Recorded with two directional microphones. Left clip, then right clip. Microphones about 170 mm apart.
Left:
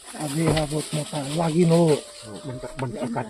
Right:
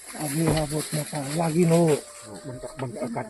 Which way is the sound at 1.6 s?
25° left (ahead or behind).